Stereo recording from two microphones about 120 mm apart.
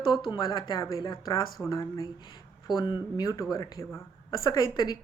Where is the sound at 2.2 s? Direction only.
40° left (ahead or behind).